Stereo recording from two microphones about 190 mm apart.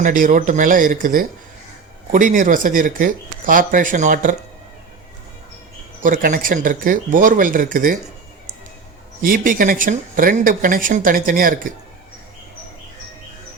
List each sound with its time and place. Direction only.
0.0 s speech: 45° right (ahead or behind)
6.0 s speech: 45° right (ahead or behind)
9.2 s speech: 45° right (ahead or behind)